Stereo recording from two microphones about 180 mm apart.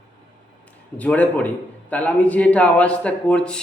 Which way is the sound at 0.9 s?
10° left (ahead or behind).